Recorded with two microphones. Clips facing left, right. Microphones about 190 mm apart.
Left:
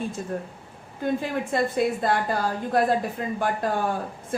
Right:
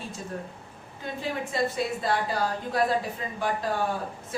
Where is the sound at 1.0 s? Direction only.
50° left (ahead or behind).